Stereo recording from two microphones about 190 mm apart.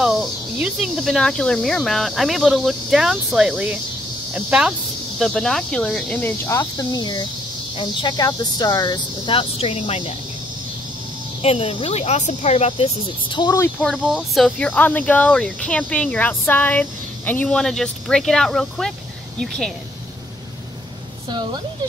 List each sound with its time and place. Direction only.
0.0 s speech: centre (ahead or behind); by 10.0 s 30° left (ahead or behind)
11.4 s speech: 30° left (ahead or behind)
13.7 s speech: 5° left (ahead or behind)
21.3 s a woman's voice: 25° right (ahead or behind)